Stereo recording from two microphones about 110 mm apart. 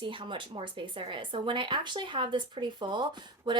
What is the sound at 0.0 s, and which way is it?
Speech, 50° right (ahead or behind).